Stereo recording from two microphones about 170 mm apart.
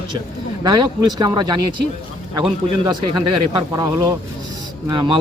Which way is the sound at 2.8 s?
25° right (ahead or behind).